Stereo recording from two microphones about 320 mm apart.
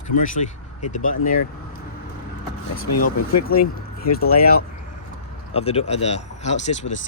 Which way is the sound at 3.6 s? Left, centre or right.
Left.